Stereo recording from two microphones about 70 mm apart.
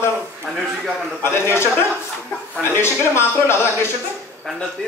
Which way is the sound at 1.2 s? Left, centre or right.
Left.